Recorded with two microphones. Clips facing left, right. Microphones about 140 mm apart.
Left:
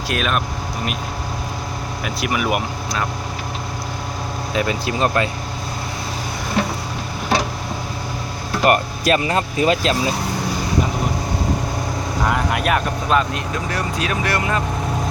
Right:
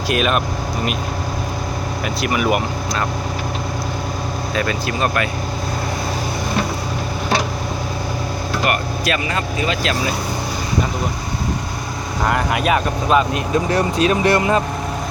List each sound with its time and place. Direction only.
0.1 s speech: 5° right (ahead or behind)
2.2 s speech: 5° left (ahead or behind)
4.5 s speech: 15° left (ahead or behind)
8.6 s speech: 40° left (ahead or behind)
12.3 s speech: centre (ahead or behind)
13.3 s speech: 25° right (ahead or behind)